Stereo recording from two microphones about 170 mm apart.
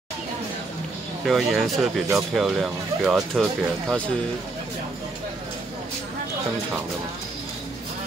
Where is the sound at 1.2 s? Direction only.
Centre (ahead or behind).